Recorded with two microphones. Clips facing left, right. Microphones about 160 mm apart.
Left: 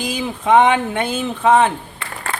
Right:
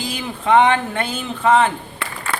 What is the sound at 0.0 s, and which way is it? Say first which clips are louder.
A man's voice: left 3 dB; 15° left (ahead or behind).